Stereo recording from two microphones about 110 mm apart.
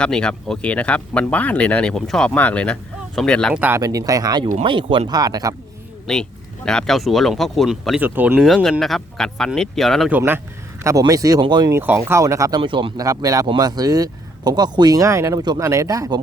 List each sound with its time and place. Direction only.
0.0 s speech: 10° left (ahead or behind)
3.5 s speech: 15° right (ahead or behind)
3.8 s speech: 30° right (ahead or behind)
4.6 s speech: 50° right (ahead or behind); by 5.5 s 35° right (ahead or behind)
6.1 s speech: 5° left (ahead or behind)
8.0 s speech: 15° right (ahead or behind)
8.4 s speech: centre (ahead or behind)
10.1 s speech: 20° right (ahead or behind)
10.8 s speech: 30° right (ahead or behind)
11.7 s speech: 15° right (ahead or behind)
11.9 s speech: 25° right (ahead or behind)
12.5 s speech: 50° right (ahead or behind)
13.0 s speech: 30° right (ahead or behind)